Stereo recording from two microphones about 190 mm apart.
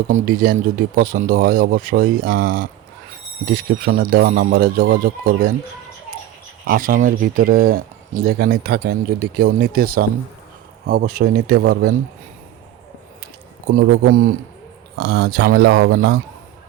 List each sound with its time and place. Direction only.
0.3 s speech: 50° right (ahead or behind)
6.7 s speech: 50° right (ahead or behind)
13.7 s speech: 45° right (ahead or behind)
14.9 s speech: 60° right (ahead or behind)